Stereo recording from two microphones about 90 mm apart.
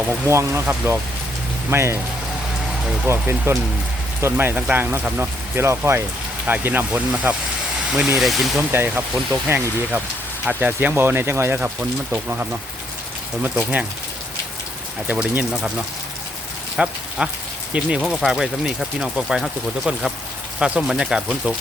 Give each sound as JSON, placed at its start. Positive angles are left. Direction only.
{"t": 0.3, "sound": "speech", "side_deg": -30}
{"t": 3.1, "sound": "speech", "side_deg": -25}
{"t": 8.7, "sound": "speech", "side_deg": -25}
{"t": 15.0, "sound": "speech", "side_deg": -15}
{"t": 16.7, "sound": "speech", "side_deg": -5}